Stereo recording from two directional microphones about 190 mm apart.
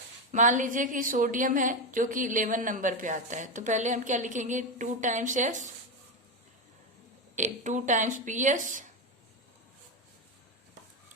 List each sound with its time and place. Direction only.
0.3 s a woman's voice: 40° right (ahead or behind)
7.3 s speech: 40° right (ahead or behind)